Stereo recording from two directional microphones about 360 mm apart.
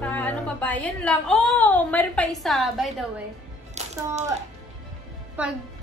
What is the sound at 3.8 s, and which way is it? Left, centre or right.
Speech, centre.